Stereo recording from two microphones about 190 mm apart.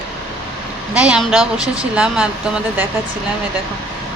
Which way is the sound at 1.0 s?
5° right (ahead or behind).